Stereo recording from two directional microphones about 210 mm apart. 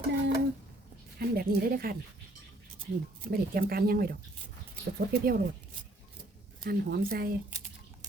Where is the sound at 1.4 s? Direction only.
45° right (ahead or behind).